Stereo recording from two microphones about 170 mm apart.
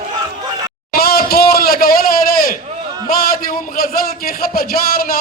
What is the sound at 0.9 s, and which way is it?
A man's voice, 65° left (ahead or behind).